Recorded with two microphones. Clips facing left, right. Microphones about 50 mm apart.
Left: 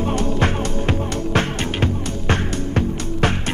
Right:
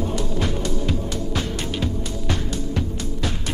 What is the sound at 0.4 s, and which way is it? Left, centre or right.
Music, left.